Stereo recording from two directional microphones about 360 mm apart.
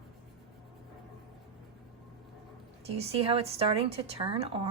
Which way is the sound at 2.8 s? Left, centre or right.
Centre.